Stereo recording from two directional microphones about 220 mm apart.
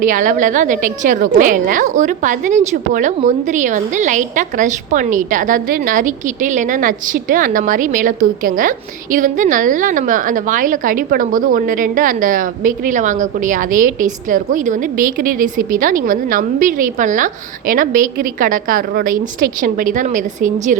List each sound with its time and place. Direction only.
0.0 s a woman's voice: 35° right (ahead or behind)